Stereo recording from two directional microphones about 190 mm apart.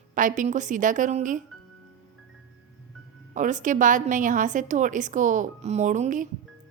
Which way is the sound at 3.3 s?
40° right (ahead or behind).